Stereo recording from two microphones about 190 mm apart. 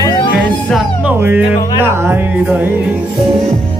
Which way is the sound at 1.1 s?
10° right (ahead or behind).